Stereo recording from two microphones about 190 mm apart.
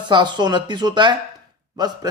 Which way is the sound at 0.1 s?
25° right (ahead or behind).